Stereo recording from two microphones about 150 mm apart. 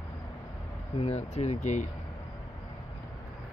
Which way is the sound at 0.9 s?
45° left (ahead or behind).